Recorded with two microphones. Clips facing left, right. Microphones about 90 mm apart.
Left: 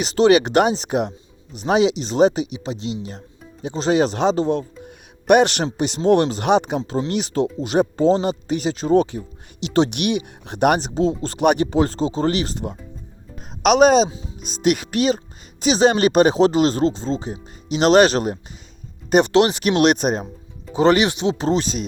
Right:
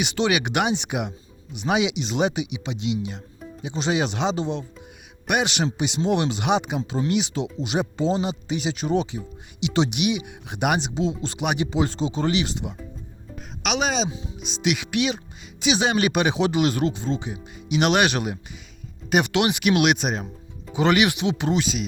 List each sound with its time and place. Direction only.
0.0 s speech: 40° left (ahead or behind)
20.7 s speech: 30° left (ahead or behind)